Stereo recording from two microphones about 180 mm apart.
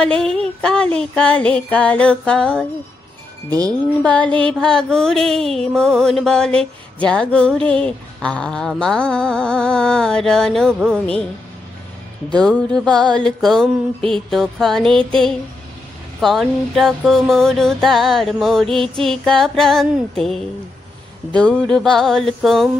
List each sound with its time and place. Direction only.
0.0 s mantra: 5° left (ahead or behind)
3.4 s wind chime: 20° right (ahead or behind)
4.0 s mantra: 5° left (ahead or behind)
12.4 s mantra: 5° left (ahead or behind)